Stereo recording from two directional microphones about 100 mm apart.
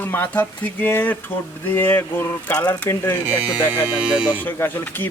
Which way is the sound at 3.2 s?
15° right (ahead or behind).